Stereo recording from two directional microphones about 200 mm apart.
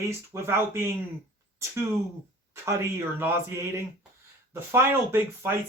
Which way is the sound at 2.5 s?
10° right (ahead or behind).